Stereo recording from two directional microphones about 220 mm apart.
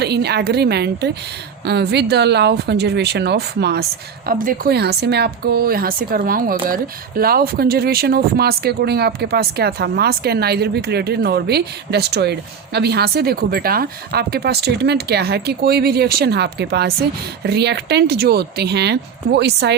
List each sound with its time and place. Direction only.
0.0 s speech: 50° right (ahead or behind)